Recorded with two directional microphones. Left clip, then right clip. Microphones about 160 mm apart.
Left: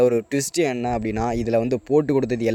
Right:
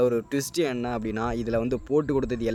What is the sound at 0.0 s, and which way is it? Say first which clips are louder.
Speech: left 5 dB; 30° left (ahead or behind).